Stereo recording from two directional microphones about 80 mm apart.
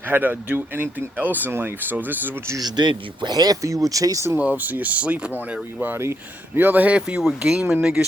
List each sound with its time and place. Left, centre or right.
0.1 s speech: right
2.6 s speech: right
4.4 s speech: centre
5.8 s speech: right
7.2 s speech: centre